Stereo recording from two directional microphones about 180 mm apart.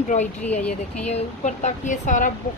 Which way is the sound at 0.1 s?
40° left (ahead or behind).